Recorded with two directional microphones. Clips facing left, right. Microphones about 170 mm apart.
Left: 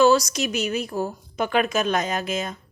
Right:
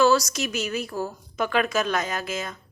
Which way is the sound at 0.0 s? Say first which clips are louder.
Left 2 dB; 20° left (ahead or behind).